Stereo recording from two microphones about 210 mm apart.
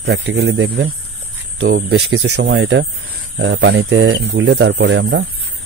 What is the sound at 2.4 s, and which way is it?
Speech, 55° right (ahead or behind).